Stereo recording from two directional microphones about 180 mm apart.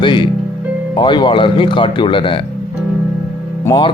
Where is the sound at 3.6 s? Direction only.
25° left (ahead or behind).